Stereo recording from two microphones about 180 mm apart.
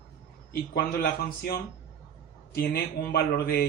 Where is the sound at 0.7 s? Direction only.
65° left (ahead or behind).